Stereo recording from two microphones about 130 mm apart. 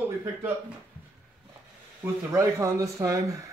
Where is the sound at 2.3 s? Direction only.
25° right (ahead or behind).